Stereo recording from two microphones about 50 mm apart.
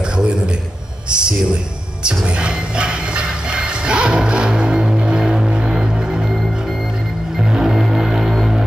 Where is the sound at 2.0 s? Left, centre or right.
Centre.